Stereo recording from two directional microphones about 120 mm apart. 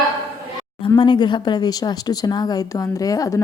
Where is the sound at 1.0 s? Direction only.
40° left (ahead or behind).